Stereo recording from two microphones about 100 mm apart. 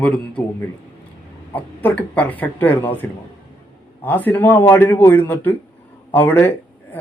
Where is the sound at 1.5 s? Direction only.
15° left (ahead or behind).